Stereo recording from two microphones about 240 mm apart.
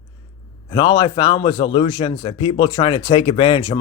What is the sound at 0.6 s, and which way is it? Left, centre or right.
A man's voice, centre.